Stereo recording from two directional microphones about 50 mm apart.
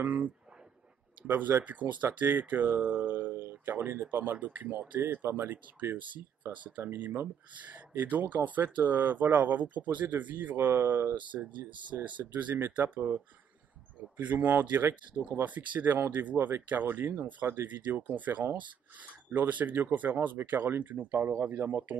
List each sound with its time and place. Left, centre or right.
0.0 s speech: right
1.6 s speech: right
6.4 s speech: right